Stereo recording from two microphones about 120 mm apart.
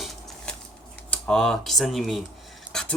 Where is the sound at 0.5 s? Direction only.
5° left (ahead or behind).